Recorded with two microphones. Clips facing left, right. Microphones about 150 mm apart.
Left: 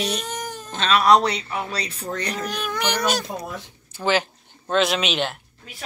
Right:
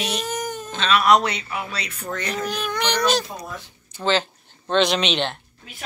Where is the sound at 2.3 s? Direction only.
Centre (ahead or behind).